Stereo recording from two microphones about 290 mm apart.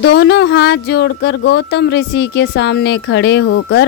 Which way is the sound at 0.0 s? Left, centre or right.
Left.